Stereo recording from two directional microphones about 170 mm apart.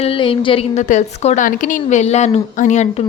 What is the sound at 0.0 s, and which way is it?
Speech, 35° left (ahead or behind).